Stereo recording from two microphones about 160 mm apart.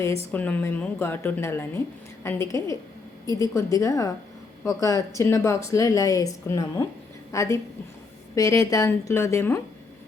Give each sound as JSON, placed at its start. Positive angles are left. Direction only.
{"t": 0.3, "sound": "a woman's voice", "side_deg": 10}